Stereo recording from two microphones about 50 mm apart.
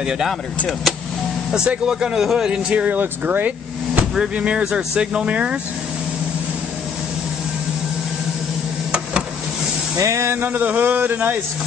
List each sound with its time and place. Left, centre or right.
0.0 s a man's voice: centre
1.5 s a man's voice: centre
2.7 s speech: right
3.0 s speech: right
4.4 s speech: right
9.9 s a sound: right
10.5 s a man's voice: right